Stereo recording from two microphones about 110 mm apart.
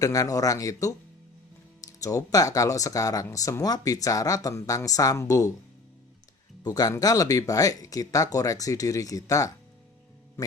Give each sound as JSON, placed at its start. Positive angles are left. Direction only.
{"t": 0.0, "sound": "speech", "side_deg": 30}
{"t": 6.6, "sound": "speech", "side_deg": 35}